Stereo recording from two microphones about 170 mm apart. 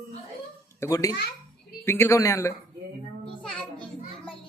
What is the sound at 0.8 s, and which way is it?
A child's voice, 20° left (ahead or behind).